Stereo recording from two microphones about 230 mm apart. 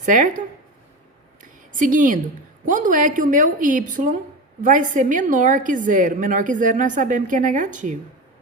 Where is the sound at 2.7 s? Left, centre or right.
Right.